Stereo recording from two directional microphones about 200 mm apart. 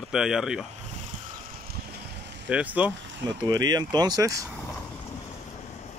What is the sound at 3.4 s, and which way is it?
Speech, 20° right (ahead or behind).